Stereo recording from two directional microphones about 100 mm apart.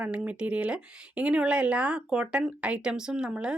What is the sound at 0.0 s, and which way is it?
Speech, 15° right (ahead or behind).